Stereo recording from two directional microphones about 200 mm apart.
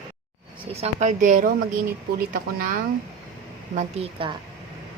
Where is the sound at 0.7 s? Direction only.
35° right (ahead or behind).